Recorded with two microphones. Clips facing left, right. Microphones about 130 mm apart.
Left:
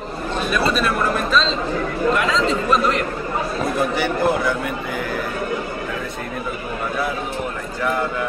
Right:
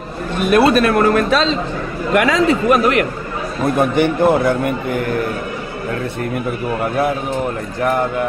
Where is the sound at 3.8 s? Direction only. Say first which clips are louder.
Right 7 dB; 55° right (ahead or behind).